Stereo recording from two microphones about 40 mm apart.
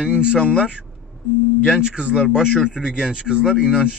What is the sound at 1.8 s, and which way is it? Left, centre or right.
Speech, right.